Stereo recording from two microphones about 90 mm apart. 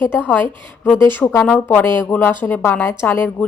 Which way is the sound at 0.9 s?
25° left (ahead or behind).